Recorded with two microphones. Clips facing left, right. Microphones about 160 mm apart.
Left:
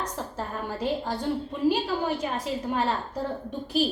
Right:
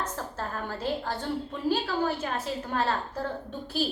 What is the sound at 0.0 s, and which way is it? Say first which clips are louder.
A woman's voice: left 1 dB; 15° left (ahead or behind).